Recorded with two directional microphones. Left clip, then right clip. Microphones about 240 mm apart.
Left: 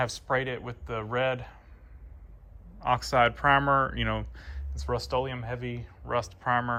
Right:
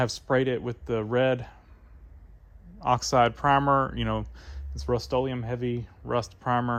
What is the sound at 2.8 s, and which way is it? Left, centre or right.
Speech, right.